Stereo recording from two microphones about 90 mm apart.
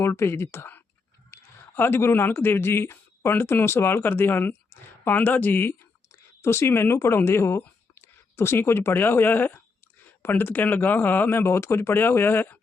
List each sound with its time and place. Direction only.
0.0 s a man's voice: 30° left (ahead or behind)